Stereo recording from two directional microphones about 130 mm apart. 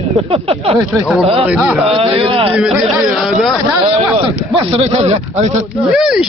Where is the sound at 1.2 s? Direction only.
45° right (ahead or behind).